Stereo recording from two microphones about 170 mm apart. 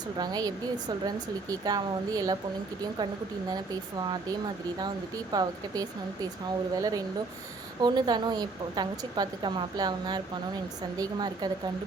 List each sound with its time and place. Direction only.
0.2 s a woman's voice: 20° right (ahead or behind)
3.5 s a woman's voice: 20° right (ahead or behind)